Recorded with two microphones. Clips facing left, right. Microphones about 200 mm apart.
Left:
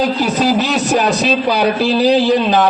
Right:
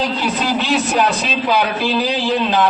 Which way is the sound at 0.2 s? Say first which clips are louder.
Left 5 dB; 40° left (ahead or behind).